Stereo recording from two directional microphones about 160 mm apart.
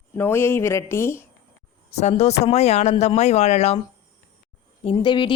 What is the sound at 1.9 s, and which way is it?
Speech, 45° left (ahead or behind).